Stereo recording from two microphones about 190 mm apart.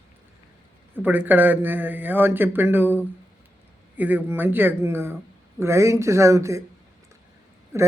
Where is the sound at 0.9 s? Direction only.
10° right (ahead or behind).